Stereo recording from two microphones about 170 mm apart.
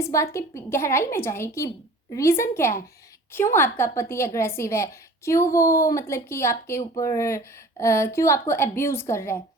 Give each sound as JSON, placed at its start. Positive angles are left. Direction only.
{"t": 0.0, "sound": "a woman's voice", "side_deg": 15}